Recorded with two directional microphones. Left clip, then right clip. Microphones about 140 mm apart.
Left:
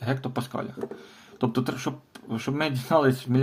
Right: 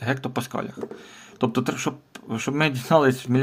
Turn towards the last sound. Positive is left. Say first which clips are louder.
# right 3 dB
turn(degrees=-35)  # may be behind; listen again after turning